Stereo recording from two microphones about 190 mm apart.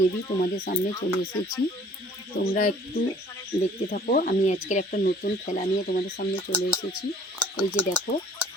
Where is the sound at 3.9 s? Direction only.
45° left (ahead or behind).